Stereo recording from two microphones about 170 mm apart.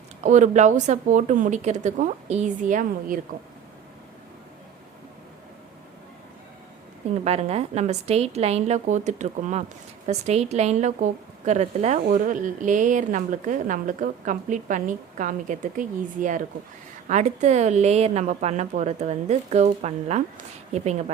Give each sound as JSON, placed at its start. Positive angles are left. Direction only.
{"t": 0.2, "sound": "a woman's voice", "side_deg": -45}
{"t": 7.3, "sound": "a woman's voice", "side_deg": -40}